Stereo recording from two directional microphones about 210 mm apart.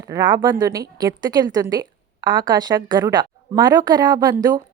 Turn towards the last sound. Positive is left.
turn(degrees=-15)  # may be behind; listen again after turning